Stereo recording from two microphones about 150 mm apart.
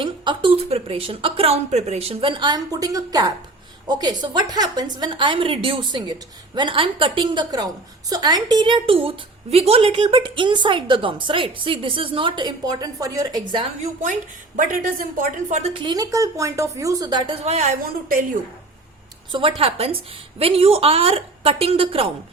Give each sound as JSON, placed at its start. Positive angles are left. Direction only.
{"t": 0.0, "sound": "a woman's voice", "side_deg": -35}
{"t": 14.0, "sound": "a woman's voice", "side_deg": -60}
{"t": 15.7, "sound": "a woman's voice", "side_deg": -35}
{"t": 19.3, "sound": "a woman's voice", "side_deg": -35}